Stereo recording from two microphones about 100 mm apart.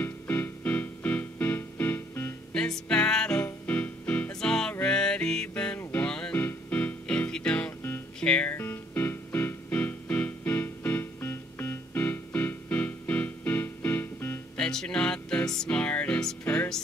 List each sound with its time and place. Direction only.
0.0 s music: 15° left (ahead or behind)
2.5 s music: 10° left (ahead or behind)
14.6 s music: 5° left (ahead or behind)